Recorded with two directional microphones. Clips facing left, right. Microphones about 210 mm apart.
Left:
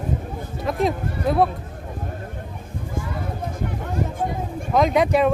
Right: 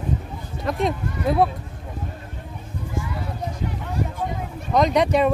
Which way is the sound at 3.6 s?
50° left (ahead or behind).